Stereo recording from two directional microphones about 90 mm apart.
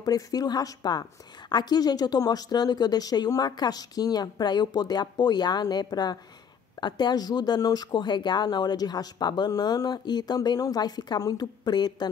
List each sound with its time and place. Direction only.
0.0 s speech: 45° left (ahead or behind)